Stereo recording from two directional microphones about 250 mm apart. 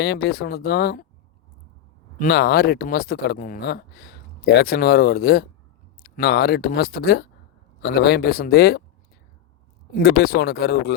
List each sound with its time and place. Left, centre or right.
0.0 s speech: left
2.1 s speech: left
9.9 s speech: left